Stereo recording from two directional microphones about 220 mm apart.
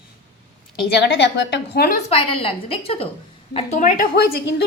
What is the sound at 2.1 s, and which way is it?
A woman's voice, 25° left (ahead or behind).